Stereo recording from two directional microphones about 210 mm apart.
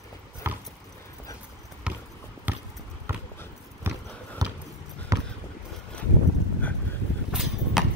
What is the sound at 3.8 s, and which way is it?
Horse, 10° right (ahead or behind).